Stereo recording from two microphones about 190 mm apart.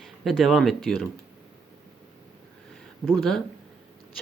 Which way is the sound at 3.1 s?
Centre (ahead or behind).